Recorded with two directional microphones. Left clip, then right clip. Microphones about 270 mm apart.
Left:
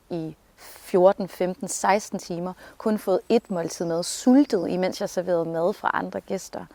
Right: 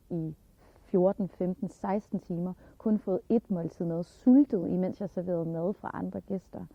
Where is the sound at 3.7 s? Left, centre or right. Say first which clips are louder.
Left 9 dB; centre.